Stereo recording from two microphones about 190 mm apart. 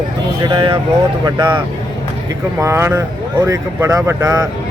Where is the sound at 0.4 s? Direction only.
25° right (ahead or behind).